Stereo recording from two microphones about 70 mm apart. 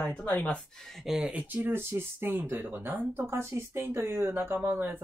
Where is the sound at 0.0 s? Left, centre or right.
Left.